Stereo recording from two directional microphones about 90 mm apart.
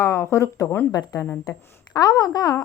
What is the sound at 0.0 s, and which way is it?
Speech, 30° left (ahead or behind).